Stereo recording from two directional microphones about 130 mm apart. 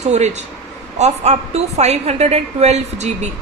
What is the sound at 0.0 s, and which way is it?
Speech, 60° right (ahead or behind).